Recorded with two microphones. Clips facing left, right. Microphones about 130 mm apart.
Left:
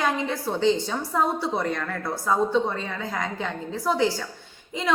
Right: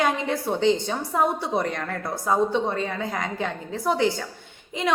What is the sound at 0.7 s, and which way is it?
Speech, 20° right (ahead or behind).